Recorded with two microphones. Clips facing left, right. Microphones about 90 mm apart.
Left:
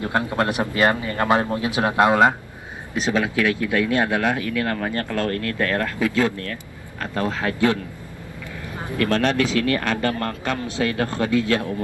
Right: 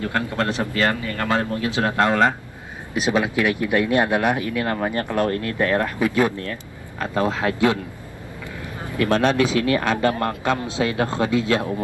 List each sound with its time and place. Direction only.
0.0 s speech: 20° left (ahead or behind)
3.0 s speech: 20° right (ahead or behind)
8.9 s speech: 20° right (ahead or behind)